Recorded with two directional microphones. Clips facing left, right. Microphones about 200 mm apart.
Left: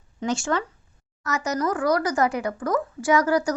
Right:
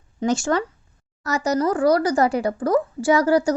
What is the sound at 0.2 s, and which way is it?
A woman's voice, 40° right (ahead or behind).